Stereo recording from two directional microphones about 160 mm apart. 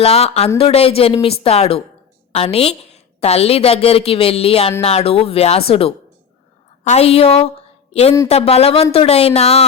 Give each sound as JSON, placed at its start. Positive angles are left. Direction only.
{"t": 0.0, "sound": "a woman's voice", "side_deg": 40}